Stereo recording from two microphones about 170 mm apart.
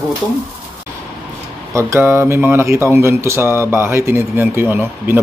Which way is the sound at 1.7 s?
15° right (ahead or behind).